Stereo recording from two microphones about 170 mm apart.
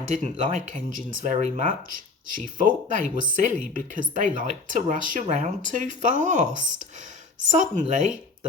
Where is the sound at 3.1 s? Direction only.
50° right (ahead or behind).